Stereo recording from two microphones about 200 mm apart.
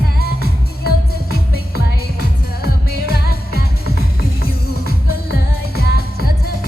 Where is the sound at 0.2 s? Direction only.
50° left (ahead or behind).